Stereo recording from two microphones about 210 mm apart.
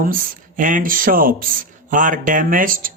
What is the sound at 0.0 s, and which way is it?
Speech, 40° right (ahead or behind).